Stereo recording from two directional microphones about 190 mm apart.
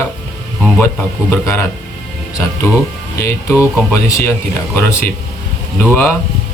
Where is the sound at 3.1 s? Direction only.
15° left (ahead or behind).